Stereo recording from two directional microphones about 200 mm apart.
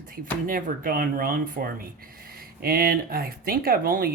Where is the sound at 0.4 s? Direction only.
45° right (ahead or behind).